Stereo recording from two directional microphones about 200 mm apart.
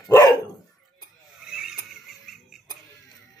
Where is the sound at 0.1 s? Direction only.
20° left (ahead or behind).